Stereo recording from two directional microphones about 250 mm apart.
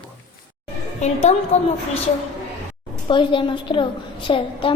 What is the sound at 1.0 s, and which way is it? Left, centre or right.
Speech, left.